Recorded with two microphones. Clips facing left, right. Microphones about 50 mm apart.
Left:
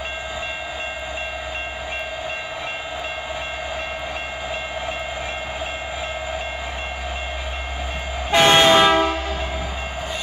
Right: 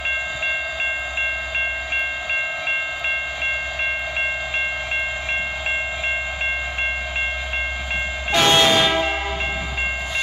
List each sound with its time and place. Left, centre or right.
8.3 s train: left